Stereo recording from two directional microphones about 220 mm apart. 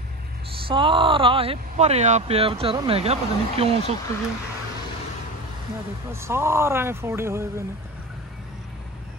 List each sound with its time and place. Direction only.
0.7 s speech: 20° right (ahead or behind)
6.1 s speech: 10° right (ahead or behind)